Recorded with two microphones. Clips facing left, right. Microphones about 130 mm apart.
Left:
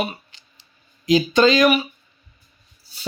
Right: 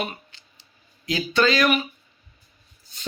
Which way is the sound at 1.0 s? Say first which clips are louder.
Left 6 dB; 20° left (ahead or behind).